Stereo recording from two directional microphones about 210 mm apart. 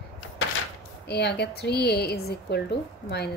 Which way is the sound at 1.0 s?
50° left (ahead or behind).